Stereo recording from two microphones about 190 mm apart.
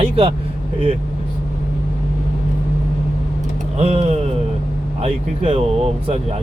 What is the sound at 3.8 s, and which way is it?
Speech, 35° right (ahead or behind).